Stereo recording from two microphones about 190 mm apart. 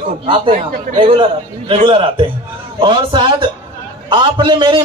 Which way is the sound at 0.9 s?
25° right (ahead or behind).